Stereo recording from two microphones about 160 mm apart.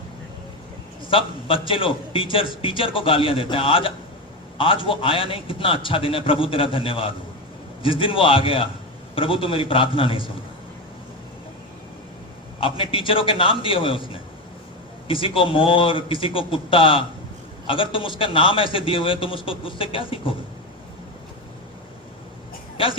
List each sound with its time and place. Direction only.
1.1 s a man's voice: 35° left (ahead or behind)
12.5 s a man's voice: 35° left (ahead or behind)